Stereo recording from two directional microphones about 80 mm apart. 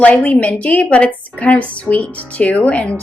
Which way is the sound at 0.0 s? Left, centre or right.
Centre.